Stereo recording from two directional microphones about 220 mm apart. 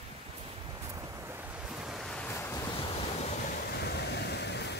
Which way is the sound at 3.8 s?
50° left (ahead or behind).